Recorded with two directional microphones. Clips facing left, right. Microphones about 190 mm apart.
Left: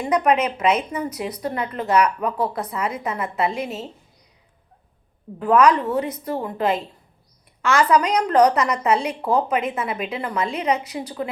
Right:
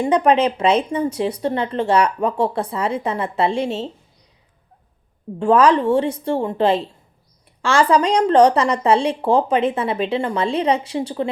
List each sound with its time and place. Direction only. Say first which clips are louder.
0.0 s speech: right 4 dB; 30° right (ahead or behind)
5.4 s speech: right 2 dB; 30° right (ahead or behind)